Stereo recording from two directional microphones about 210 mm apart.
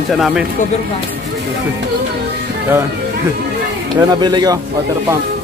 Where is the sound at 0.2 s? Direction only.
5° right (ahead or behind).